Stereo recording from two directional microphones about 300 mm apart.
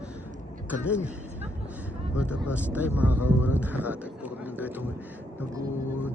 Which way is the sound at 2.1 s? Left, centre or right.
Centre.